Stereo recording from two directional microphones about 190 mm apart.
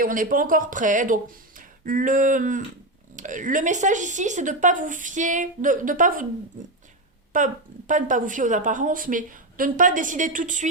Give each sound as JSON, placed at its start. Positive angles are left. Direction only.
{"t": 0.0, "sound": "a woman's voice", "side_deg": -45}
{"t": 7.3, "sound": "a woman's voice", "side_deg": -45}